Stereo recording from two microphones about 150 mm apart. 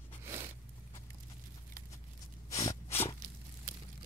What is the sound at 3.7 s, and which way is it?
Pour, 65° right (ahead or behind).